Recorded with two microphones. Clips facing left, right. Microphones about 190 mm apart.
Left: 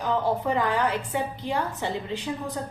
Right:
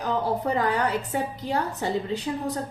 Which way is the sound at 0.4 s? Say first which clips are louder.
Even; 40° right (ahead or behind).